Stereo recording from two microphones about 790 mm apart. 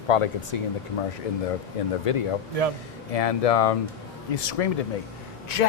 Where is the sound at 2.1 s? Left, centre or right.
Left.